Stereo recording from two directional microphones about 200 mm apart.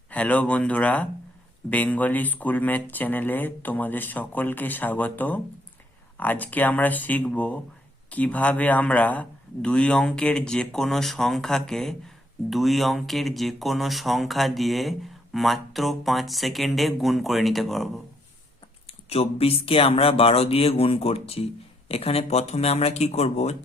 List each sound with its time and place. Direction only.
0.1 s a man's voice: 5° left (ahead or behind)
18.9 s speech: 30° left (ahead or behind)